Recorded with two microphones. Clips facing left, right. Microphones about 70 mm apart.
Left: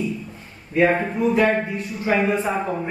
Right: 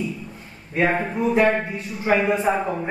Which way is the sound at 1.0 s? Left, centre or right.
Centre.